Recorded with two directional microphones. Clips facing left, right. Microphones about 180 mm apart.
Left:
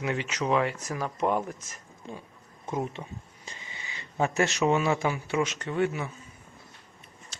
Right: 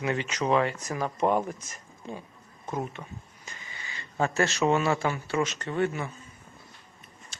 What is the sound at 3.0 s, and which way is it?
Speech, 20° left (ahead or behind).